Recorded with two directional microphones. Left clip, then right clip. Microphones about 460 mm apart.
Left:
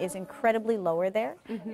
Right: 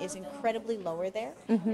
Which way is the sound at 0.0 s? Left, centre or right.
Left.